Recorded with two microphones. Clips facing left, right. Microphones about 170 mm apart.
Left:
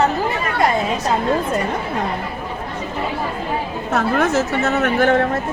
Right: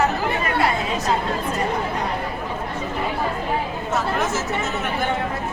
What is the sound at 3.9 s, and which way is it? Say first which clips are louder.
Speech: left 6 dB; 60° left (ahead or behind).